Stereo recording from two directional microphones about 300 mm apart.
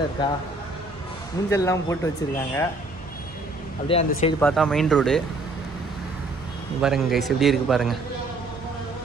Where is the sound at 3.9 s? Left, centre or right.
Left.